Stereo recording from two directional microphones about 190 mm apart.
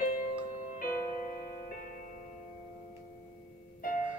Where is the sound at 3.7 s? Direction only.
45° left (ahead or behind).